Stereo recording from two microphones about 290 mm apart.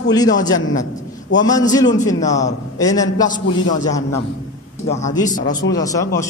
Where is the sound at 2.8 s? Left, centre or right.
Centre.